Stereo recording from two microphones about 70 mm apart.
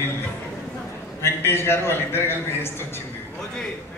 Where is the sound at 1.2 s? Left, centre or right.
Left.